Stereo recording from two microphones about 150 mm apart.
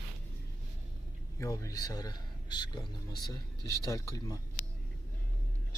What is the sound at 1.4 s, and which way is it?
Speech, 20° left (ahead or behind).